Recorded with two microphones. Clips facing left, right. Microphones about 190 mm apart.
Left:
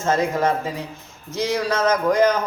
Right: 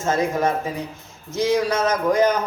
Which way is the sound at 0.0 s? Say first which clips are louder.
Left 1 dB; 15° right (ahead or behind).